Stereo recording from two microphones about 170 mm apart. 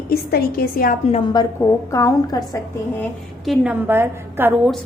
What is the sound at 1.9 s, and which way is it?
Speech, 20° left (ahead or behind).